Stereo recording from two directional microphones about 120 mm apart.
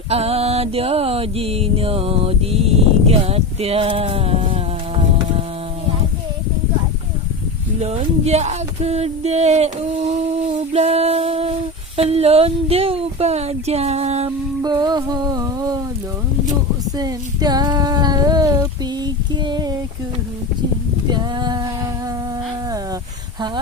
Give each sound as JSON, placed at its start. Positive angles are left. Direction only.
{"t": 0.1, "sound": "mantra", "side_deg": -55}
{"t": 7.8, "sound": "a sound", "side_deg": -65}
{"t": 10.5, "sound": "music", "side_deg": -60}
{"t": 11.9, "sound": "speech", "side_deg": -60}
{"t": 14.6, "sound": "music", "side_deg": -35}
{"t": 17.0, "sound": "female singing", "side_deg": -35}
{"t": 21.1, "sound": "female singing", "side_deg": -35}